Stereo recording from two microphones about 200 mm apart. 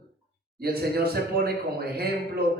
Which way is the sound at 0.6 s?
50° right (ahead or behind).